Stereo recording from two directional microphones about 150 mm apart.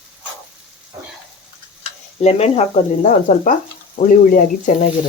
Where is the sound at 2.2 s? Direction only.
45° left (ahead or behind).